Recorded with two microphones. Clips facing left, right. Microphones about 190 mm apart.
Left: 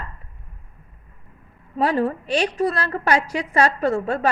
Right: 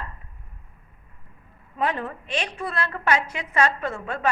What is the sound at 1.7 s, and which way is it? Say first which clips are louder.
A woman's voice: left 7 dB; 35° left (ahead or behind).